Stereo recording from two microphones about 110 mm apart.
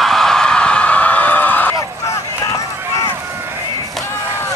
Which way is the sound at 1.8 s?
30° left (ahead or behind).